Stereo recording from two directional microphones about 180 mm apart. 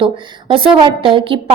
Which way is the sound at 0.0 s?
30° right (ahead or behind).